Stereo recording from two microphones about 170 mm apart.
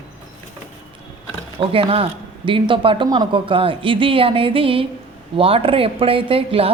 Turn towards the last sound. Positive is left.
turn(degrees=-35)  # may be behind; listen again after turning